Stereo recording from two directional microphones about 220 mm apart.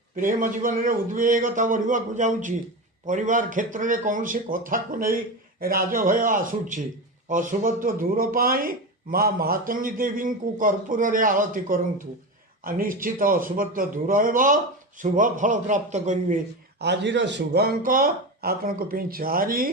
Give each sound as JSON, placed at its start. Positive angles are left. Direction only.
{"t": 0.2, "sound": "speech", "side_deg": -40}
{"t": 16.8, "sound": "speech", "side_deg": -50}